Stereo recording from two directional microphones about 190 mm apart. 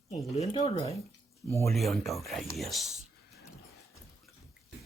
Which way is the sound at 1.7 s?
Centre (ahead or behind).